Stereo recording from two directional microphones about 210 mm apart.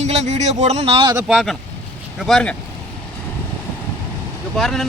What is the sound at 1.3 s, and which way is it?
Speech, centre (ahead or behind).